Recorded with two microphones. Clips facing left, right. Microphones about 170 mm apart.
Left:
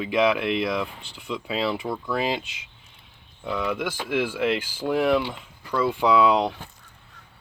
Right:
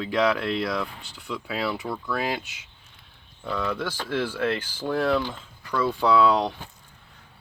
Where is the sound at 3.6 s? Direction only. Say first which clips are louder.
Left 1 dB; 10° left (ahead or behind).